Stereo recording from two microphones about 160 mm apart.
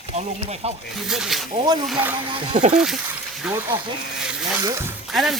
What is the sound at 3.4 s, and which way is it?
Speech, 15° right (ahead or behind).